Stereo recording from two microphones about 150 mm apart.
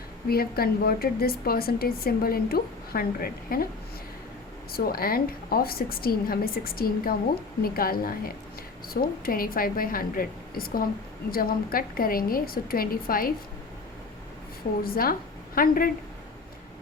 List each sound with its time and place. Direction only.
0.3 s a woman's voice: 90° left
4.7 s a woman's voice: 85° left
14.8 s a woman's voice: 75° left (ahead or behind)